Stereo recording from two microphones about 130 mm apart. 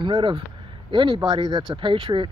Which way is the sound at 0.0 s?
40° right (ahead or behind).